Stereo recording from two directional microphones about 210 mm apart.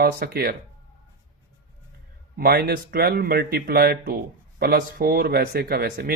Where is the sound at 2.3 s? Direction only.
45° right (ahead or behind).